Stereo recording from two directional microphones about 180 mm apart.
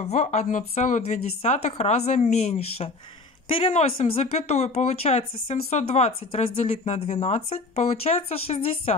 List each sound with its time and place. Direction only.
0.0 s speech: 40° left (ahead or behind)